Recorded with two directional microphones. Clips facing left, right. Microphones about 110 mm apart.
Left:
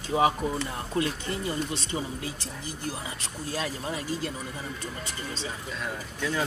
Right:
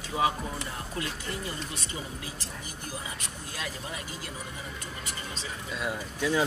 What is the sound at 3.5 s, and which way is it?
Speech, 35° left (ahead or behind).